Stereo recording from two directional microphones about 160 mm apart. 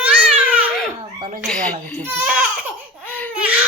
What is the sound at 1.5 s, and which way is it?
Speech, 5° left (ahead or behind).